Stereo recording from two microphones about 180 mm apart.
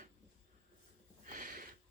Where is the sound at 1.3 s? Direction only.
50° right (ahead or behind).